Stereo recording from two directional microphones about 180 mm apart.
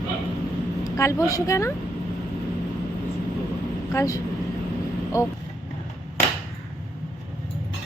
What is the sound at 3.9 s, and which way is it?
Speech, 15° left (ahead or behind).